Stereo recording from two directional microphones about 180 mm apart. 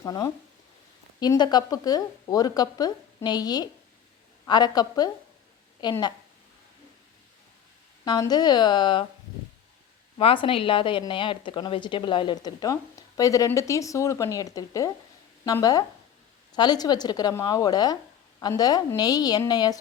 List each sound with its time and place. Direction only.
0.0 s a woman's voice: 20° left (ahead or behind)
8.0 s a woman's voice: 20° left (ahead or behind)
10.2 s a woman's voice: 30° left (ahead or behind)